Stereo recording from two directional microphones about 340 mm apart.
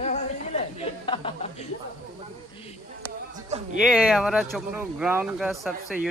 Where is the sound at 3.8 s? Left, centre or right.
Centre.